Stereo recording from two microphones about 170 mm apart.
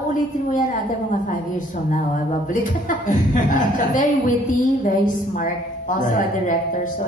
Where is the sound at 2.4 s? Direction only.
50° left (ahead or behind).